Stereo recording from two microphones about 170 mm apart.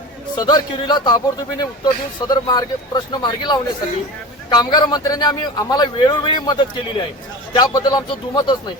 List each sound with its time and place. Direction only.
0.3 s a man's voice: 25° left (ahead or behind)